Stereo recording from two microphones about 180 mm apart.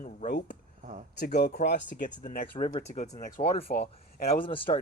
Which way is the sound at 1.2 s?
65° left (ahead or behind).